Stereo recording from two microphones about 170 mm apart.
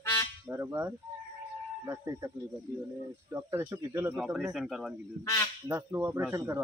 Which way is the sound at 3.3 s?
15° right (ahead or behind).